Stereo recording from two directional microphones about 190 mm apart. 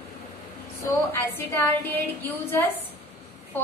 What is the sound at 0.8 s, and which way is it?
A woman's voice, 10° left (ahead or behind).